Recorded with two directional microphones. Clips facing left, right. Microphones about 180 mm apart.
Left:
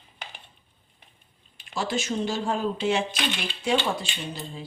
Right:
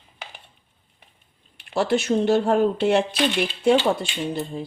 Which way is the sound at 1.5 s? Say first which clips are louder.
Right 7 dB; 65° right (ahead or behind).